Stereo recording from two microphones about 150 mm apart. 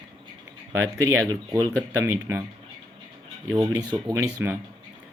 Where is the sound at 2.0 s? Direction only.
20° right (ahead or behind).